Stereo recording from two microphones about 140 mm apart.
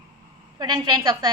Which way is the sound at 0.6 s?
30° right (ahead or behind).